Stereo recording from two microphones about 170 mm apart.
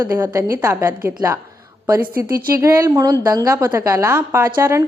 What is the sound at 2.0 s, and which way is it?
Speech, 55° right (ahead or behind).